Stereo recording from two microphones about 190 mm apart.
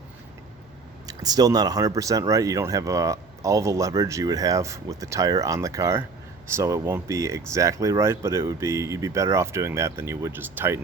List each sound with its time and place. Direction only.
1.0 s speech: 20° right (ahead or behind)